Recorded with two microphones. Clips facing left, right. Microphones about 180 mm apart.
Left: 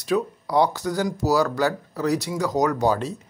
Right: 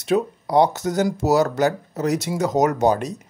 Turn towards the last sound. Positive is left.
turn(degrees=-20)  # may be behind; listen again after turning